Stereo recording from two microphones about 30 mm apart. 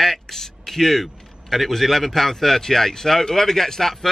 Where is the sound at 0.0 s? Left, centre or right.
Centre.